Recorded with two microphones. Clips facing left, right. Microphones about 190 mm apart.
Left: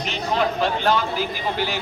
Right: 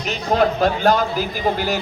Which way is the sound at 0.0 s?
45° right (ahead or behind).